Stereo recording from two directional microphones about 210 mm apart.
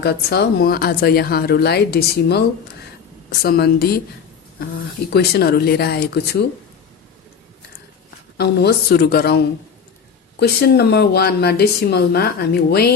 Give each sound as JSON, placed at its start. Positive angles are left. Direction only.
{"t": 0.0, "sound": "speech", "side_deg": 50}
{"t": 3.4, "sound": "speech", "side_deg": 50}
{"t": 5.1, "sound": "speech", "side_deg": 50}
{"t": 8.4, "sound": "speech", "side_deg": 50}
{"t": 10.4, "sound": "speech", "side_deg": 50}